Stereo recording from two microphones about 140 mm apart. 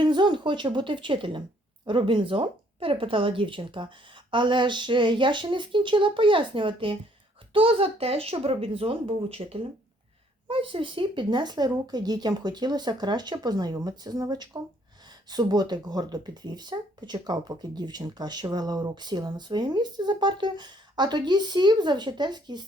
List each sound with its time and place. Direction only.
0.0 s a woman's voice: 35° right (ahead or behind)